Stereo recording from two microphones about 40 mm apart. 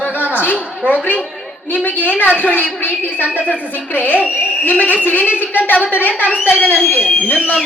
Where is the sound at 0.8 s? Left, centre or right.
Right.